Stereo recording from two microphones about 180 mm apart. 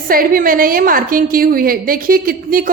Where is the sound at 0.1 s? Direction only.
50° right (ahead or behind).